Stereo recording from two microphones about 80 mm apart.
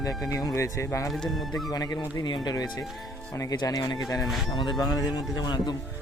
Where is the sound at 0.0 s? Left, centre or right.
Left.